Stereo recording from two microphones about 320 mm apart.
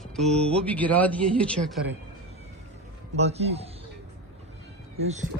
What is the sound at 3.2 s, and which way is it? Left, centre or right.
Speech, centre.